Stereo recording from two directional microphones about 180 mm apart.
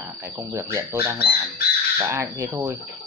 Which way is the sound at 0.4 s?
15° right (ahead or behind).